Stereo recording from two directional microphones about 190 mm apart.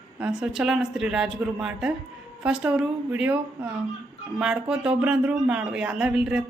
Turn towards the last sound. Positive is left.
turn(degrees=-5)  # may be behind; listen again after turning